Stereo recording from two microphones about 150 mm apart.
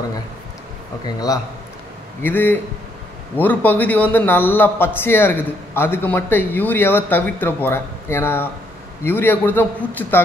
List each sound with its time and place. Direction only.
1.0 s a man's voice: 25° left (ahead or behind)
2.2 s a man's voice: 10° left (ahead or behind)